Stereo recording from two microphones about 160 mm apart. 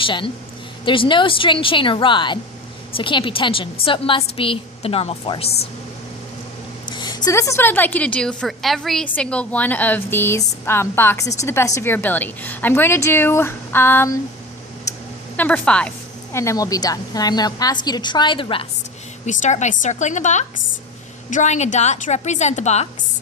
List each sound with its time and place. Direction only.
0.0 s a woman's voice: 30° left (ahead or behind)
6.9 s a woman's voice: 25° left (ahead or behind)
15.4 s a woman's voice: 10° left (ahead or behind)
16.3 s a woman's voice: 20° left (ahead or behind)
19.2 s a woman's voice: 50° left (ahead or behind)